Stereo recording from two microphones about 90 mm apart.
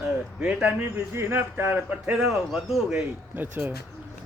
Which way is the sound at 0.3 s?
15° right (ahead or behind).